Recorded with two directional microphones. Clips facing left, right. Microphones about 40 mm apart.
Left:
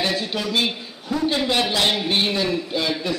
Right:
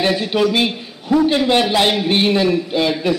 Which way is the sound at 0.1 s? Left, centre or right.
Right.